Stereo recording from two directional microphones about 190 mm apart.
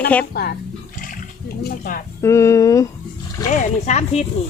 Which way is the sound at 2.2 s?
15° left (ahead or behind).